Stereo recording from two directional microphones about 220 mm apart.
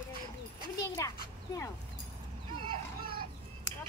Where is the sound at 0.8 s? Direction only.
15° left (ahead or behind).